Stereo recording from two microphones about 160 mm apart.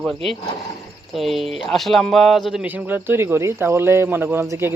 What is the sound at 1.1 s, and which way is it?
Speech, centre (ahead or behind).